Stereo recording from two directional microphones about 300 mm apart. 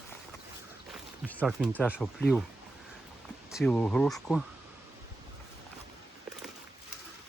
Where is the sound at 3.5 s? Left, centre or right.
Centre.